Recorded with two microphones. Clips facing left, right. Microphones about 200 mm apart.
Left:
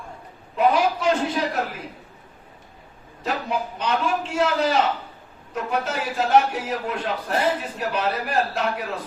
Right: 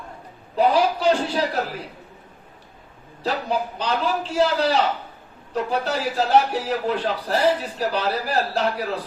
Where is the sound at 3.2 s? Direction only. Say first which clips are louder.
Right 2 dB; 30° right (ahead or behind).